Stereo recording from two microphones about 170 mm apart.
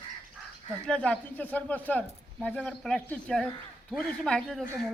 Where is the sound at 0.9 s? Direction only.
5° left (ahead or behind).